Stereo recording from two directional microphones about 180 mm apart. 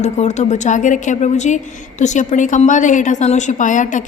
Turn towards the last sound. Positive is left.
turn(degrees=45)  # may be behind; listen again after turning